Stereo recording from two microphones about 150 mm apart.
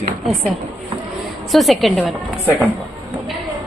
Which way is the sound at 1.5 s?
Centre (ahead or behind).